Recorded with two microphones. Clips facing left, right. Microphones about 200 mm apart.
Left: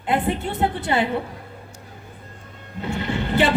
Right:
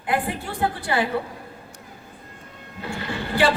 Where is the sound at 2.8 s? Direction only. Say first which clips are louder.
Left 4 dB; 20° left (ahead or behind).